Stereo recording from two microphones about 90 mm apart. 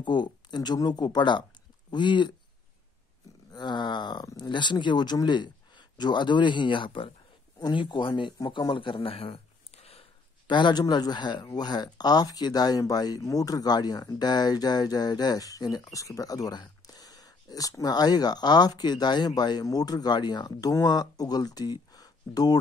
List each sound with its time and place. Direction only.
0.0 s speech: 55° left (ahead or behind)
3.5 s speech: 55° left (ahead or behind)
7.5 s a man's voice: 60° left (ahead or behind); by 9.4 s 90° left
9.9 s speech: 60° left (ahead or behind)